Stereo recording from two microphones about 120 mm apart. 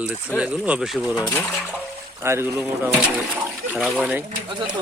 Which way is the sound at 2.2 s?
20° right (ahead or behind).